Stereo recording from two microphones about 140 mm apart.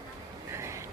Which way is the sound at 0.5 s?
20° right (ahead or behind).